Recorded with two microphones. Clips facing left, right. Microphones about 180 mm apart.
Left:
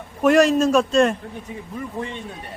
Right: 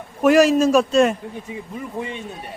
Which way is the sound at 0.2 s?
Centre (ahead or behind).